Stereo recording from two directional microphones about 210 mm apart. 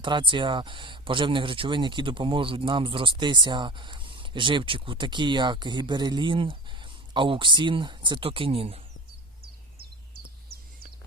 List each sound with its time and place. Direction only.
0.0 s speech: 25° right (ahead or behind)